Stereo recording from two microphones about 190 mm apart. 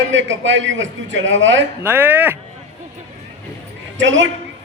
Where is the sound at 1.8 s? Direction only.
10° right (ahead or behind).